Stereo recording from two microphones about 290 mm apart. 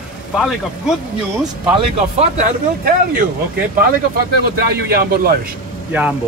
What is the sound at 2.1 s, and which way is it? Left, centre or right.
Speech, right.